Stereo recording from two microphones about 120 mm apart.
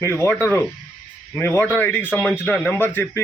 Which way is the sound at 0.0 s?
20° left (ahead or behind).